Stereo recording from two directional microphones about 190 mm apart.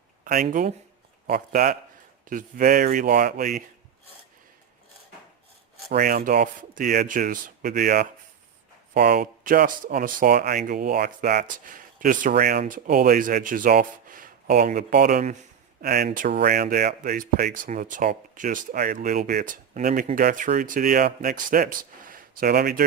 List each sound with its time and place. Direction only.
1.3 s speech: 45° right (ahead or behind)
5.9 s speech: 50° right (ahead or behind)